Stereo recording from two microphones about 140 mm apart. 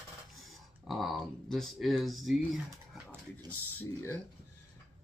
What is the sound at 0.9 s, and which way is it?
Speech, centre (ahead or behind).